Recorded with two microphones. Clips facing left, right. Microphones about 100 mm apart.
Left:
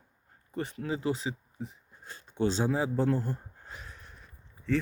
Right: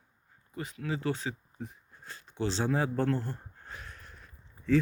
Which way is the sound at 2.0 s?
25° left (ahead or behind).